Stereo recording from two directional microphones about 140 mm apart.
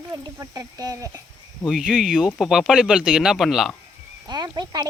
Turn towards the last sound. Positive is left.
turn(degrees=-30)  # may be behind; listen again after turning